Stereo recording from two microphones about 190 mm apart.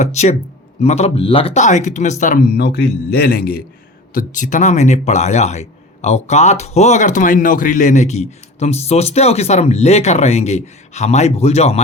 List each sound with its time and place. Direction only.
0.0 s speech: 35° left (ahead or behind)